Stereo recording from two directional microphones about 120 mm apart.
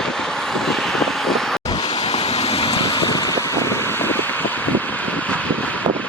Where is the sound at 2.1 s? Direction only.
60° left (ahead or behind).